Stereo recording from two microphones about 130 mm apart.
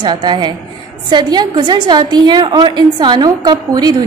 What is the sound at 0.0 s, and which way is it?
A woman's voice, 35° right (ahead or behind).